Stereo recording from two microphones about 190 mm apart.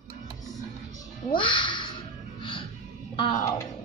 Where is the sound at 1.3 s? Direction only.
25° left (ahead or behind).